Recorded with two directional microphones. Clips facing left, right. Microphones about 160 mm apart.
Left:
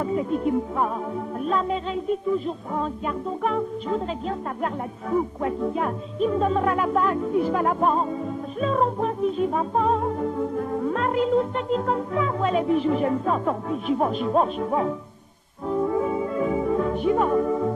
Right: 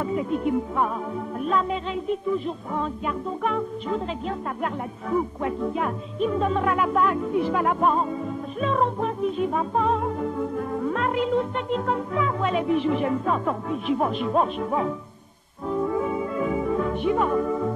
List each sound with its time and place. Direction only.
0.0 s music: 40° left (ahead or behind)